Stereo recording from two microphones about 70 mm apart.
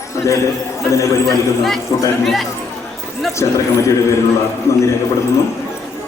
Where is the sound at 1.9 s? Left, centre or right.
Left.